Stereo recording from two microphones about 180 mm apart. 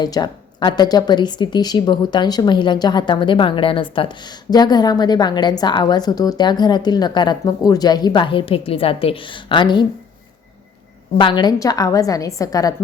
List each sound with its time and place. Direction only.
0.0 s a woman's voice: 25° left (ahead or behind)
11.2 s a woman's voice: 25° left (ahead or behind)